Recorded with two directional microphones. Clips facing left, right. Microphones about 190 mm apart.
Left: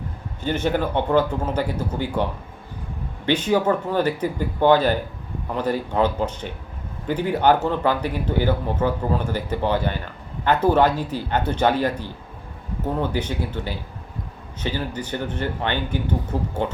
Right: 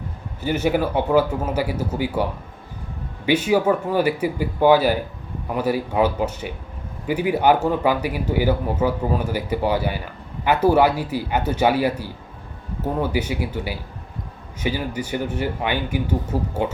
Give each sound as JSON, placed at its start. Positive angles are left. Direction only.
{"t": 0.4, "sound": "a man's voice", "side_deg": -10}
{"t": 3.2, "sound": "a man's voice", "side_deg": -10}